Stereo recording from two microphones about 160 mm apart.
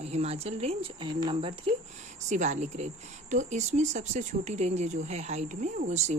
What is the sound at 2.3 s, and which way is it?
Speech, 45° right (ahead or behind).